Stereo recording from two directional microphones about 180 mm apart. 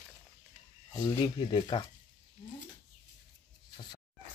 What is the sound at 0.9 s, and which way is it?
Speech, 25° left (ahead or behind).